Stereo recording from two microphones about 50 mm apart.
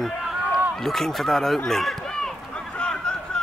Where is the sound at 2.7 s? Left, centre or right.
Centre.